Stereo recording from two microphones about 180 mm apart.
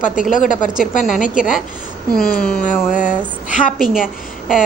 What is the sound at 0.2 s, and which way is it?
Speech, 45° left (ahead or behind).